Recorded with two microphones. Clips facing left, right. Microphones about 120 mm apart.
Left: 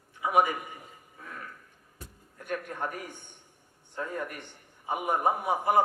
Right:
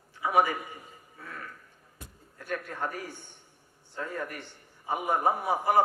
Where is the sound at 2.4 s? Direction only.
15° left (ahead or behind).